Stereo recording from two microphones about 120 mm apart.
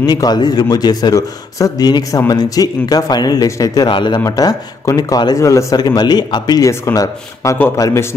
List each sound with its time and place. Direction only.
0.0 s a man's voice: 35° left (ahead or behind)
6.7 s speech: 25° left (ahead or behind)